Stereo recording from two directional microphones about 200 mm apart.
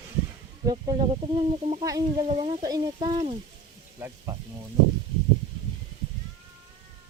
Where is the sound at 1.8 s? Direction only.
15° right (ahead or behind).